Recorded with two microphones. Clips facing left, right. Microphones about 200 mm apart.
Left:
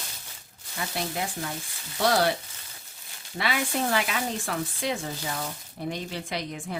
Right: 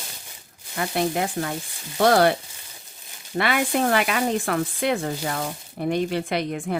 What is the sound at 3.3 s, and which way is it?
Speech, 60° right (ahead or behind).